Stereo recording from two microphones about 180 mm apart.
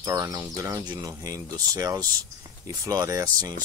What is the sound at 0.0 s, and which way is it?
Speech, 20° right (ahead or behind).